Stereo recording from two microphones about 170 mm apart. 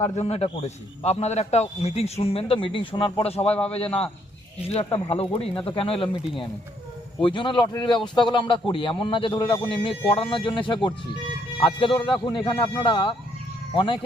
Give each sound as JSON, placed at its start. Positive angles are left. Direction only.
{"t": 0.2, "sound": "speech", "side_deg": 35}
{"t": 4.7, "sound": "speech", "side_deg": 35}
{"t": 7.2, "sound": "a man's voice", "side_deg": 30}